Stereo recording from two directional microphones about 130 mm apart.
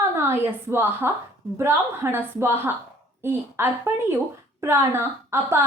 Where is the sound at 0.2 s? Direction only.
20° right (ahead or behind).